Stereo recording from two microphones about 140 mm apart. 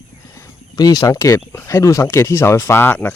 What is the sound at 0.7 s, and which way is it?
Speech, 30° left (ahead or behind).